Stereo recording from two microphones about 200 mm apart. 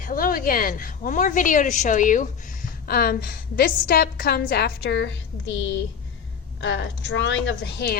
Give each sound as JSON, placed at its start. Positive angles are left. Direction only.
{"t": 0.0, "sound": "a woman's voice", "side_deg": 45}
{"t": 6.6, "sound": "a woman's voice", "side_deg": 65}